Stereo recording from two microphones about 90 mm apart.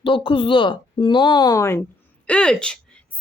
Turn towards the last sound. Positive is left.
turn(degrees=10)  # may be behind; listen again after turning